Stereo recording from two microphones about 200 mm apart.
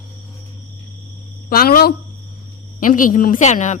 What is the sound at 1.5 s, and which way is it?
A woman's voice, 50° left (ahead or behind).